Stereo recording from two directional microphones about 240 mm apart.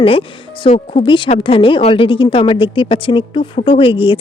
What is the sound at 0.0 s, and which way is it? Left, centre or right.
Speech, left.